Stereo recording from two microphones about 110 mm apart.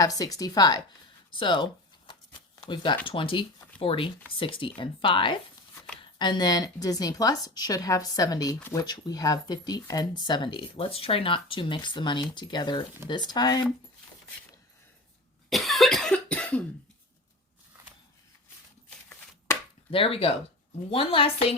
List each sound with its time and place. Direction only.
0.0 s speech: 35° left (ahead or behind)
1.3 s speech: 50° left (ahead or behind)
2.6 s speech: 45° left (ahead or behind)
15.4 s cough: centre (ahead or behind)
19.9 s a woman's voice: 55° left (ahead or behind)